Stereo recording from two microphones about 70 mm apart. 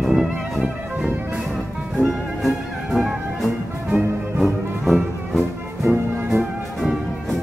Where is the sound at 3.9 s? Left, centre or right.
Right.